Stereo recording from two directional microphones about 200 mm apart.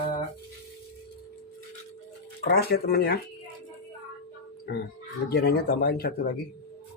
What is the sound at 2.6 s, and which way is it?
Speech, 50° left (ahead or behind).